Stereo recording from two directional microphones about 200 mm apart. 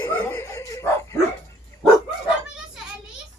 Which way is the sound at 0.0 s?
10° left (ahead or behind).